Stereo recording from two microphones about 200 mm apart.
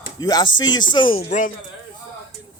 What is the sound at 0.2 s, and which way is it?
Speech, 20° left (ahead or behind).